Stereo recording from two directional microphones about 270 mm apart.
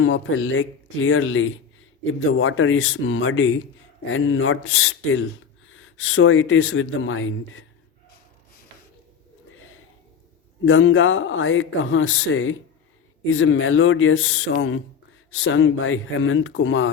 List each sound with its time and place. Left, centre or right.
0.0 s speech: left
10.7 s speech: left